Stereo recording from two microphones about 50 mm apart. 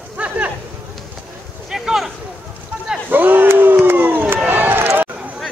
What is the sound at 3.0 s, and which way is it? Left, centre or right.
Battle cry, right.